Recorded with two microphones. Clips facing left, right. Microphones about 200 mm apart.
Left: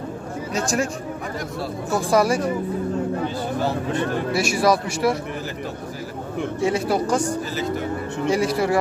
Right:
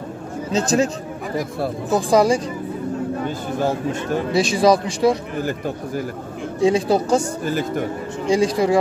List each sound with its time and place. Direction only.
0.5 s speech: 20° right (ahead or behind)
1.9 s speech: 15° right (ahead or behind)
4.3 s speech: 20° right (ahead or behind)
6.6 s speech: 20° right (ahead or behind)
8.3 s speech: 15° right (ahead or behind)